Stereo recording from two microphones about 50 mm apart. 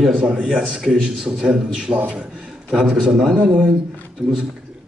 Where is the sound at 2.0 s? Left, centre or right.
Right.